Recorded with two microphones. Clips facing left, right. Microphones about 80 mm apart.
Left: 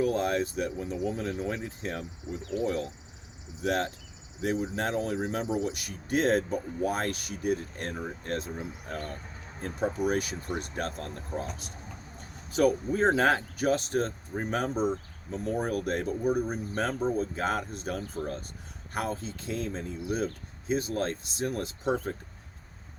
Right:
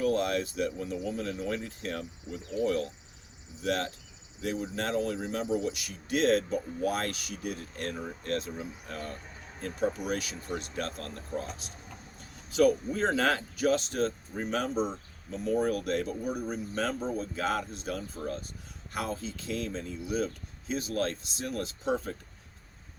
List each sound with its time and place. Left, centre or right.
0.2 s a man's voice: left
12.5 s a man's voice: left